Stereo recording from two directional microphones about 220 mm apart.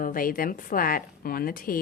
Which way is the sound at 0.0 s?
40° left (ahead or behind).